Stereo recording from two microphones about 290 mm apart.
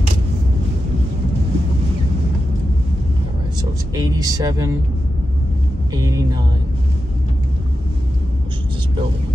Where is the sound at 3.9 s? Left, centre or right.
Centre.